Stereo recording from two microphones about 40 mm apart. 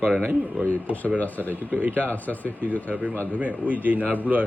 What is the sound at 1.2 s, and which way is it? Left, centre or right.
Speech, left.